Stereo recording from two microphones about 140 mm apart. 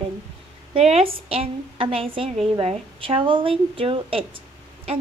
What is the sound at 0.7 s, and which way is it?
A woman's voice, 45° right (ahead or behind).